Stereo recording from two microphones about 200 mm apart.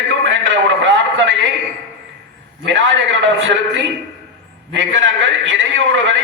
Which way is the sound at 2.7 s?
70° right (ahead or behind).